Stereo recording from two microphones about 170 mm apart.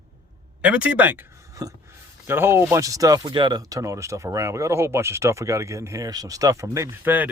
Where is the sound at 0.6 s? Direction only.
10° right (ahead or behind).